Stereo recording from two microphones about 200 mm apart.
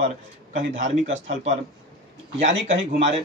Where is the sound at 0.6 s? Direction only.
35° right (ahead or behind).